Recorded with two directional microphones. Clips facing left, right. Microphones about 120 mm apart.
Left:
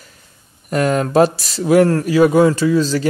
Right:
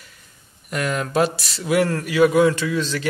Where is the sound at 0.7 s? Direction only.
40° left (ahead or behind).